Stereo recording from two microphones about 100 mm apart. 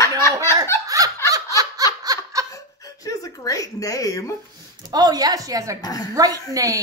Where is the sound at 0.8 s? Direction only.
35° right (ahead or behind).